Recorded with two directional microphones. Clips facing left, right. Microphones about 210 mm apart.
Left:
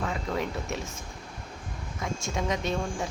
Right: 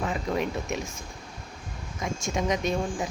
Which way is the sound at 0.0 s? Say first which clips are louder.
Right 3 dB; 20° right (ahead or behind).